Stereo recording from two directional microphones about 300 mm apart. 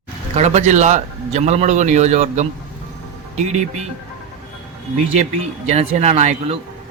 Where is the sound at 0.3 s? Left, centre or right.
Right.